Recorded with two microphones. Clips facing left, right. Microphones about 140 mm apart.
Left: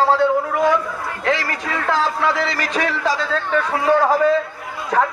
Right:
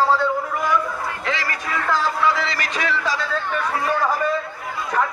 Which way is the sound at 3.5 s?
90° left.